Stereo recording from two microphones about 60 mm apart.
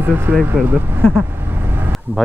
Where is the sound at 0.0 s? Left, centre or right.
Right.